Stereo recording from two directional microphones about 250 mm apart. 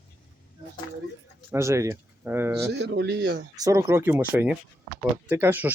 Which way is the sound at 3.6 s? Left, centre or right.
Centre.